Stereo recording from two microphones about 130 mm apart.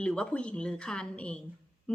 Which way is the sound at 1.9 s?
10° left (ahead or behind).